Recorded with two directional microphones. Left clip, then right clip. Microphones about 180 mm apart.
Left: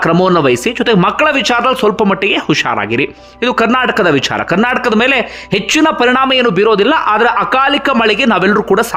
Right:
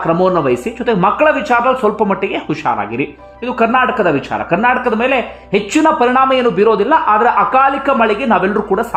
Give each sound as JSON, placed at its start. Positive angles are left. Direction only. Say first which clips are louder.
{"t": 0.0, "sound": "speech", "louder": "left 3 dB", "side_deg": 25}